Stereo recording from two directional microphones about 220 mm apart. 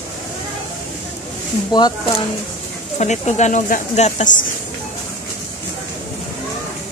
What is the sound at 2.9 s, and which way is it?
Speech, 30° left (ahead or behind).